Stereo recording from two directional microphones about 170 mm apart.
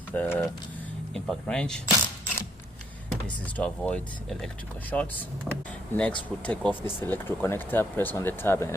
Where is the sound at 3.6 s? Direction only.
10° left (ahead or behind).